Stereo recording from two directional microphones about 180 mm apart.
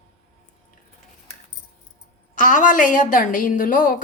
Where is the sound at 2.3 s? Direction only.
45° left (ahead or behind).